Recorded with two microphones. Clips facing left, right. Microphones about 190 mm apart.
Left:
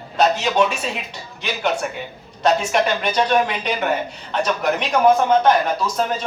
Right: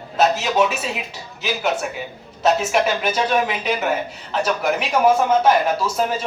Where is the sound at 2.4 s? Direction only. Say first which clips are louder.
Even; 5° right (ahead or behind).